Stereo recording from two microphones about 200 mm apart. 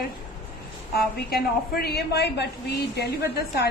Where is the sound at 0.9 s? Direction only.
50° left (ahead or behind).